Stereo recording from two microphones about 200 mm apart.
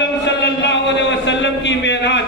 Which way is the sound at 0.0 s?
60° left (ahead or behind).